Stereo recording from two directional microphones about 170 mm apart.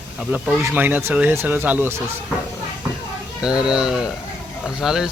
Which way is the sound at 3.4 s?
5° right (ahead or behind).